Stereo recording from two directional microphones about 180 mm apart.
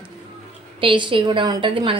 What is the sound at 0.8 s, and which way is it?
A woman's voice, 30° right (ahead or behind).